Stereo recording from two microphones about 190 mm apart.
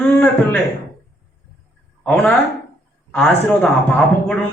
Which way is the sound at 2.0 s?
5° left (ahead or behind).